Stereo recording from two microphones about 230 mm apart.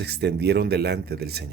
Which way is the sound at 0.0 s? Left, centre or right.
Right.